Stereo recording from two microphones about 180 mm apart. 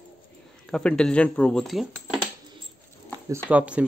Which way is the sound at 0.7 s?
5° left (ahead or behind).